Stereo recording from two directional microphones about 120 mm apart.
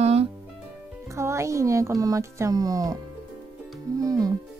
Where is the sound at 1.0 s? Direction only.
25° right (ahead or behind).